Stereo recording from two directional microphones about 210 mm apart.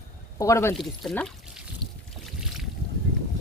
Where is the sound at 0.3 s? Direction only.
15° left (ahead or behind).